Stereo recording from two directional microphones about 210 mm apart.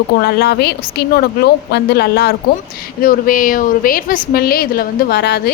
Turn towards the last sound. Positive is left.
turn(degrees=50)  # may be behind; listen again after turning